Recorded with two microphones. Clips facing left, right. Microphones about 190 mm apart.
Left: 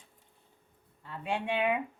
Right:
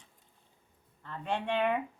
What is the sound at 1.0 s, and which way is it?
Speech, 10° left (ahead or behind).